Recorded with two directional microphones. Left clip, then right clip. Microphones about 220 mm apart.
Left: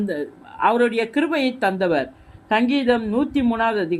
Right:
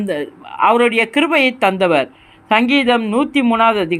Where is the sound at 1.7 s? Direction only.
65° right (ahead or behind).